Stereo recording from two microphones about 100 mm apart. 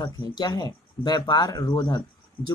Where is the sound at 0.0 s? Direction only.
45° left (ahead or behind).